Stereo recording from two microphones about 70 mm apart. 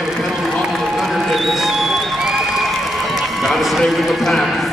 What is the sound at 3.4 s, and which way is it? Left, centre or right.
A man's voice, centre.